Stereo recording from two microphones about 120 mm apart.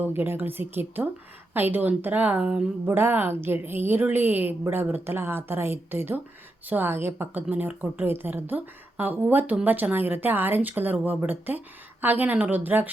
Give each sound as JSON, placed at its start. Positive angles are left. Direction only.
{"t": 0.0, "sound": "a woman's voice", "side_deg": -15}